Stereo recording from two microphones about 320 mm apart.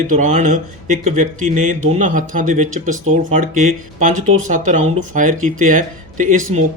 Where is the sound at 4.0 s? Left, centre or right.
Right.